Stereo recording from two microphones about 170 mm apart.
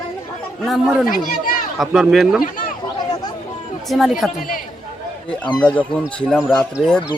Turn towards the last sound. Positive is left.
turn(degrees=5)  # may be behind; listen again after turning